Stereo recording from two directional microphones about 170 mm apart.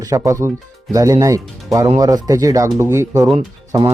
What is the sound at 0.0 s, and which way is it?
Speech, 20° right (ahead or behind).